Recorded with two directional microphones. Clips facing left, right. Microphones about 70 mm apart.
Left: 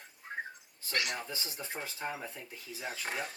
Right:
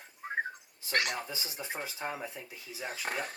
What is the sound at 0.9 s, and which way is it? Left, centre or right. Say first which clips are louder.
Speech: right 4 dB; right.